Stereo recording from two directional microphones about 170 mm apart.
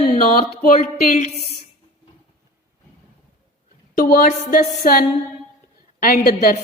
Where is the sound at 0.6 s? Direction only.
50° left (ahead or behind).